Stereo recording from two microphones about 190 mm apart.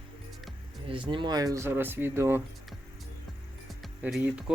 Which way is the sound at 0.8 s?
25° right (ahead or behind).